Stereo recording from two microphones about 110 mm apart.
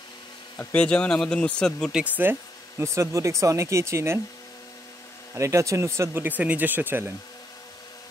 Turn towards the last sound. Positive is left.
turn(degrees=-20)  # may be behind; listen again after turning